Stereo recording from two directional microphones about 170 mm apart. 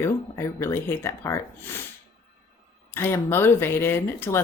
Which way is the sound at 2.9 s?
15° left (ahead or behind).